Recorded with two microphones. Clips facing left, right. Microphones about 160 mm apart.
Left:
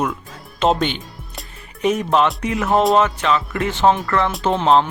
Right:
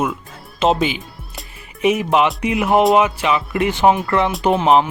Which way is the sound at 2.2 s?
10° right (ahead or behind).